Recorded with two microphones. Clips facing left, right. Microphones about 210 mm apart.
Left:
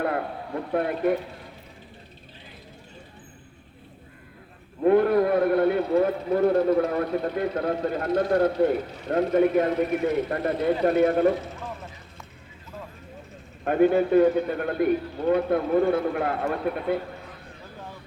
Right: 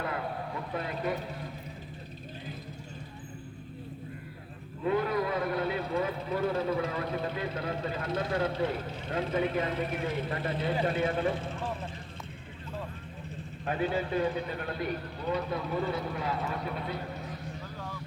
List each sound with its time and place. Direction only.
0.0 s a sound: 60° left (ahead or behind)
4.8 s a man's voice: 60° left (ahead or behind)
11.4 s speech: 30° right (ahead or behind)
13.7 s a man's voice: 55° left (ahead or behind)